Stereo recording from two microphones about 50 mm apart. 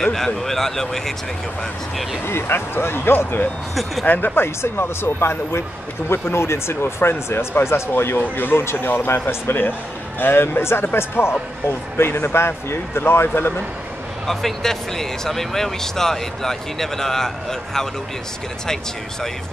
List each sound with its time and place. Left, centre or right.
0.0 s speech: centre
2.2 s a man's voice: left
4.0 s speech: left
4.4 s a man's voice: left
8.2 s a man's voice: left
14.2 s speech: centre